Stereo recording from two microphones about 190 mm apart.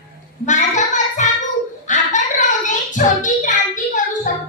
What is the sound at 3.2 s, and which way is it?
Child singing, 40° left (ahead or behind).